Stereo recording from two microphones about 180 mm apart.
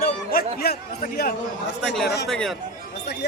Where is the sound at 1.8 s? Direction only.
Centre (ahead or behind).